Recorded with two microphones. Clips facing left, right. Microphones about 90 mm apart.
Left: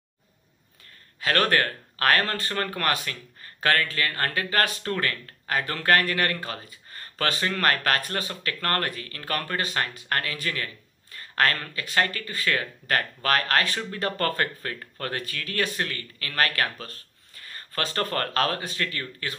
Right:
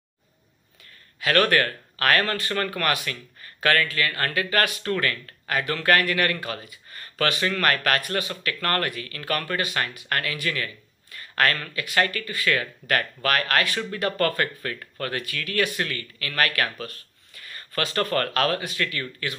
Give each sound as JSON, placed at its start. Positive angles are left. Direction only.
{"t": 1.2, "sound": "speech", "side_deg": 35}